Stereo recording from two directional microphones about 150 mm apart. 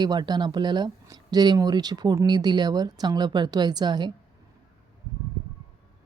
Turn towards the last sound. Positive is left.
turn(degrees=-30)  # may be behind; listen again after turning